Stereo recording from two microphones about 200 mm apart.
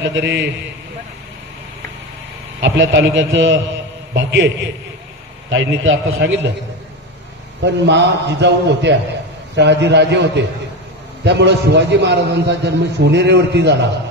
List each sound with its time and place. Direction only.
0.0 s a man's voice: 60° right (ahead or behind)
2.6 s a man's voice: 65° right (ahead or behind)
5.5 s a man's voice: 70° right (ahead or behind)
7.6 s a man's voice: 60° right (ahead or behind)